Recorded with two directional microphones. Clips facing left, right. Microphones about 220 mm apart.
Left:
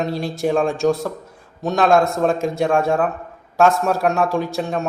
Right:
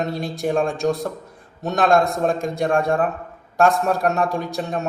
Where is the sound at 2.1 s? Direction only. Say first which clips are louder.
Left 3 dB; centre (ahead or behind).